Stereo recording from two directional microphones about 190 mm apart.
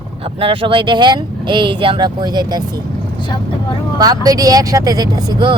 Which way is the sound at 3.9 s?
20° right (ahead or behind).